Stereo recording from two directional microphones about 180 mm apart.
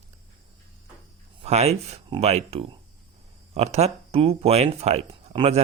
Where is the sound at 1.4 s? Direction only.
35° right (ahead or behind).